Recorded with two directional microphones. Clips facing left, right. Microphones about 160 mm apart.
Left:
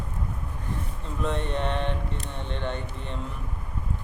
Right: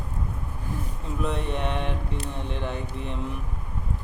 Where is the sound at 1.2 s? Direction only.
5° right (ahead or behind).